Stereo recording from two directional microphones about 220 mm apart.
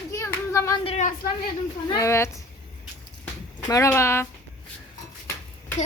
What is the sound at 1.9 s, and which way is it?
Speech, 15° left (ahead or behind).